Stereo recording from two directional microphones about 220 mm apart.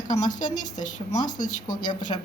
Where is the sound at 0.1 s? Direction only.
35° left (ahead or behind).